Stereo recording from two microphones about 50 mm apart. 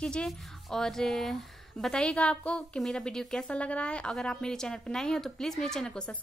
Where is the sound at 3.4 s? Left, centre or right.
Left.